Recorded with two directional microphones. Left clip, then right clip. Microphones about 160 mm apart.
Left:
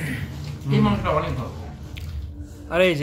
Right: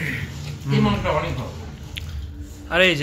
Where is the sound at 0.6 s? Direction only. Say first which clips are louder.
Right 1 dB; 10° right (ahead or behind).